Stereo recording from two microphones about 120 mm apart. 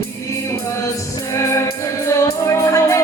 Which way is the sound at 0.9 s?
25° left (ahead or behind).